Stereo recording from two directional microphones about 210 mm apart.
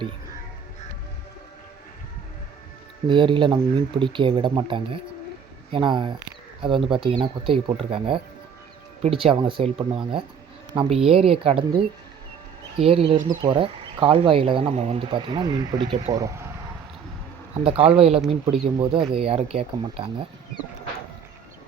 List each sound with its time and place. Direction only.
3.1 s speech: 25° right (ahead or behind)
12.7 s speech: 25° right (ahead or behind)
17.5 s speech: 25° right (ahead or behind)